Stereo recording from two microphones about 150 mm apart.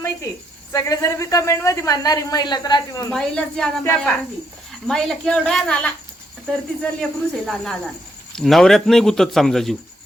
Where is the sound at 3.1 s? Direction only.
5° left (ahead or behind).